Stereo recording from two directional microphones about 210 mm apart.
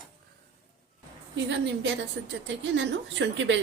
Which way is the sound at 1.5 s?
55° right (ahead or behind).